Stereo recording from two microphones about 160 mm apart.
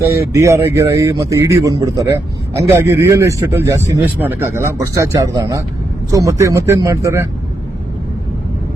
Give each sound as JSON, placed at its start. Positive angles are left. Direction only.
{"t": 0.2, "sound": "a man's voice", "side_deg": -20}